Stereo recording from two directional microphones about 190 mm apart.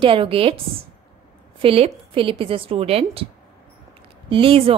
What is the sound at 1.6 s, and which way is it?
A woman's voice, 30° right (ahead or behind).